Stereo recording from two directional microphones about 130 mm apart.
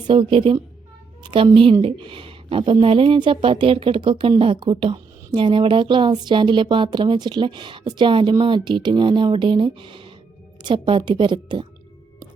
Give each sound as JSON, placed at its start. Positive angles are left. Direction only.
{"t": 0.1, "sound": "a woman's voice", "side_deg": -40}
{"t": 1.2, "sound": "a sound", "side_deg": -40}
{"t": 1.8, "sound": "speech", "side_deg": -40}